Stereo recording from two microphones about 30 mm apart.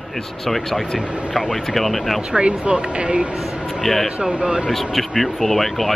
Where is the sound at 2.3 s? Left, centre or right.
Right.